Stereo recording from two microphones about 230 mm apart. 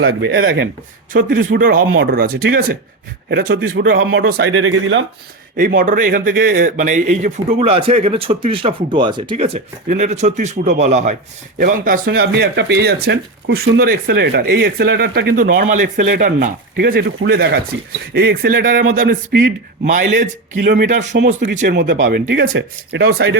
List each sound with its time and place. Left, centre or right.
0.0 s speech: right
4.2 s speech: right
5.5 s speech: right
21.8 s speech: right